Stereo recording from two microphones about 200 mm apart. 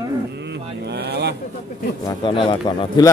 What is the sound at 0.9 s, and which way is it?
Vehicle, 55° right (ahead or behind).